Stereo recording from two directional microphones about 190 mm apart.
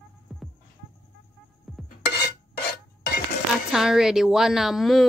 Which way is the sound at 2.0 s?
60° left (ahead or behind).